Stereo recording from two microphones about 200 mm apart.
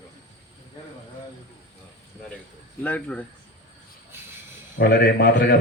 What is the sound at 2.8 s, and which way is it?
Speech, 5° left (ahead or behind).